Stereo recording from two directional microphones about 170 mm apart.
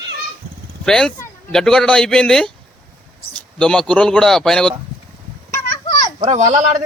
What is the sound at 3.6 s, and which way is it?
Speech, 5° left (ahead or behind).